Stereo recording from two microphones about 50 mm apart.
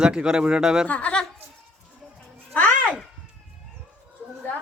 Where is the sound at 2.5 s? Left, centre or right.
Left.